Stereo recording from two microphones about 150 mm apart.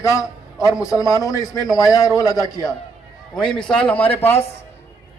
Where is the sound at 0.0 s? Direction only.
20° left (ahead or behind).